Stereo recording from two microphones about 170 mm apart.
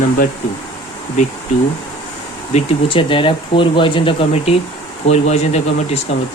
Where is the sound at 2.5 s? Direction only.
35° left (ahead or behind).